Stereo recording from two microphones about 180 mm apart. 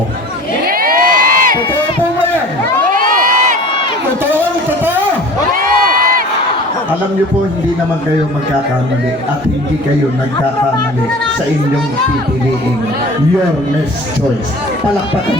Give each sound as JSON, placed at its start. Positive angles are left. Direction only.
{"t": 0.7, "sound": "crowd", "side_deg": -55}
{"t": 2.9, "sound": "crowd", "side_deg": -50}
{"t": 5.5, "sound": "crowd", "side_deg": -50}